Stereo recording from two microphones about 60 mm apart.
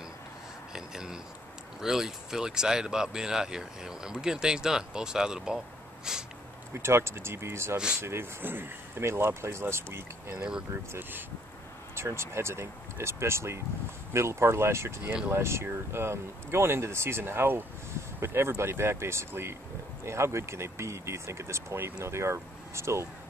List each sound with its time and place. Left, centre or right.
0.7 s a sound: centre
1.8 s speech: centre
6.1 s snort: centre
6.7 s speech: right
7.7 s speech: centre
8.0 s speech: right
10.3 s speech: centre
10.9 s speech: right
11.9 s speech: right